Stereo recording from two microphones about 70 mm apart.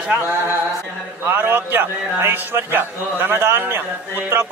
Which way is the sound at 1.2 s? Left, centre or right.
Right.